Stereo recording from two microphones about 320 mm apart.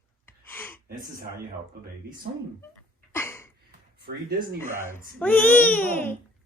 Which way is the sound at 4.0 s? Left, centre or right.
Right.